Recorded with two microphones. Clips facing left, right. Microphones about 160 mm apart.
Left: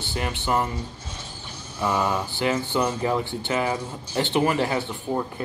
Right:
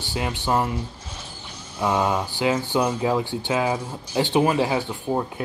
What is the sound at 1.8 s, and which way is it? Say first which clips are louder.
Speech: right 2 dB; 10° right (ahead or behind).